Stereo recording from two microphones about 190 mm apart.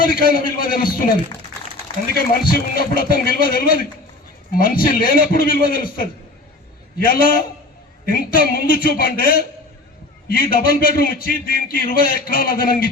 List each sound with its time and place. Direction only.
0.0 s a man's voice: 50° left (ahead or behind)
2.1 s a man's voice: 50° left (ahead or behind)